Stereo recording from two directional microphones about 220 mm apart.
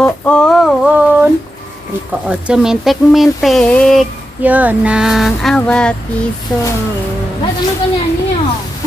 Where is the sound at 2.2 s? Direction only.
5° right (ahead or behind).